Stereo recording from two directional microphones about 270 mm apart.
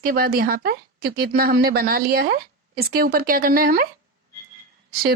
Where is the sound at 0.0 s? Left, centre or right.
Right.